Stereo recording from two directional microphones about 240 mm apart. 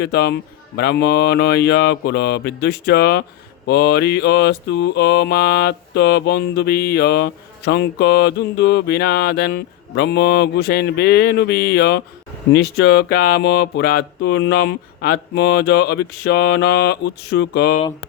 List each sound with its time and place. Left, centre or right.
0.0 s mantra: left